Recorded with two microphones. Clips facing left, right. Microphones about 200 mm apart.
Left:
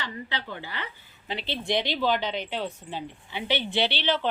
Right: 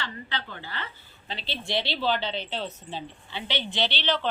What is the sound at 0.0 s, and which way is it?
A woman's voice, 15° left (ahead or behind).